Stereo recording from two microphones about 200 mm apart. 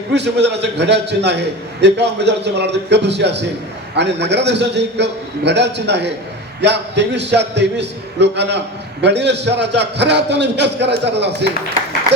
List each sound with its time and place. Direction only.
0.1 s a man's voice: 60° right (ahead or behind)